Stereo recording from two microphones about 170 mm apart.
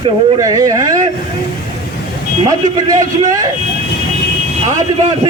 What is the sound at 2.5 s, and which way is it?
Speech, 20° right (ahead or behind).